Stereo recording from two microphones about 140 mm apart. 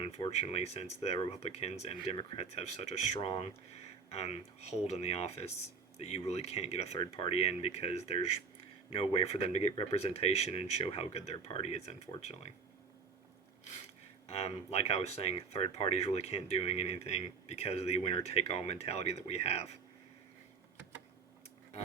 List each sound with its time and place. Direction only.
0.3 s speech: 50° left (ahead or behind)
13.7 s speech: 50° left (ahead or behind)